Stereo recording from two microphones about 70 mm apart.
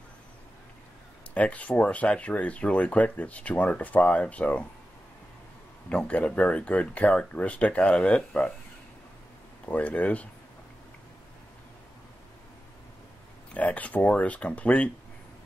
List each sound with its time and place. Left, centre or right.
1.3 s speech: centre
5.9 s speech: centre
9.7 s speech: left
13.6 s speech: left